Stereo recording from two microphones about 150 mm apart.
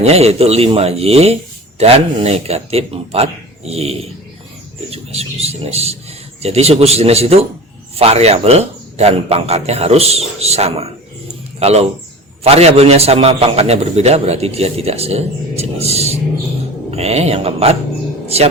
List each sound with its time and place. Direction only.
0.0 s a man's voice: 45° right (ahead or behind)